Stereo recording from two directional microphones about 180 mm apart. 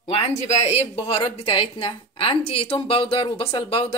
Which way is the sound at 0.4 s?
40° left (ahead or behind).